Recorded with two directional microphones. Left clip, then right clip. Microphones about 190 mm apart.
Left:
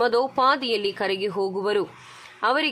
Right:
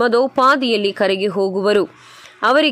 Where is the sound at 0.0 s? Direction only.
25° right (ahead or behind).